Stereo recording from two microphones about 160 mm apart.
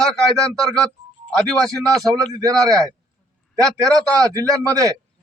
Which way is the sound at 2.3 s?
20° right (ahead or behind).